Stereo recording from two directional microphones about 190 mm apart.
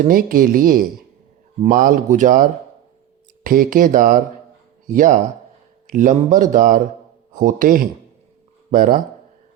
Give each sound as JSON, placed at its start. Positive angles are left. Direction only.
{"t": 0.0, "sound": "speech", "side_deg": -50}